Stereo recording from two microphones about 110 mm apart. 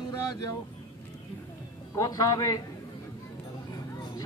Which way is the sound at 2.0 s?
35° left (ahead or behind).